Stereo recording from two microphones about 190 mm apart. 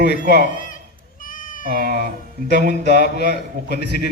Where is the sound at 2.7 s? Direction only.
60° left (ahead or behind).